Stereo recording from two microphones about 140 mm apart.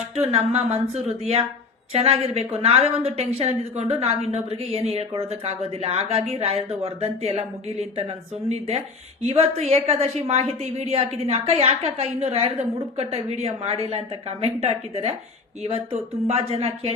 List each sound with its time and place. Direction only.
0.2 s a woman's voice: 50° right (ahead or behind)